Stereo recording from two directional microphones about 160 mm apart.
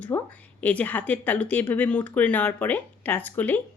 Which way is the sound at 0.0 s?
10° left (ahead or behind).